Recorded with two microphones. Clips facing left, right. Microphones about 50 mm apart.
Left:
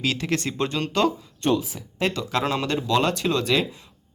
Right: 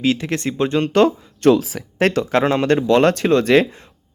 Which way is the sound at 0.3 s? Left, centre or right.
Right.